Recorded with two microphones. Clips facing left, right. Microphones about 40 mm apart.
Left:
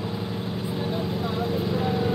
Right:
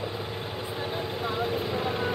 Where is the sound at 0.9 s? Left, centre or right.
Right.